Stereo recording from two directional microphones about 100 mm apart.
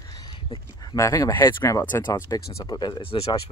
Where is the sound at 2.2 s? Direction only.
40° left (ahead or behind).